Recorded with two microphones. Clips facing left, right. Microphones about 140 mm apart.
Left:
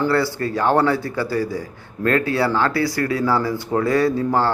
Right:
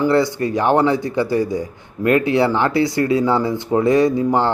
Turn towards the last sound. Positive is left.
turn(degrees=-20)  # may be behind; listen again after turning